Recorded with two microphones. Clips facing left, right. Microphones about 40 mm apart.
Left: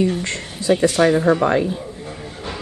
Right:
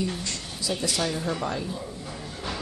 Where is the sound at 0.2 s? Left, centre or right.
Left.